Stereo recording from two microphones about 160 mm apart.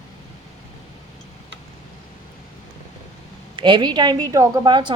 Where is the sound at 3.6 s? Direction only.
30° right (ahead or behind).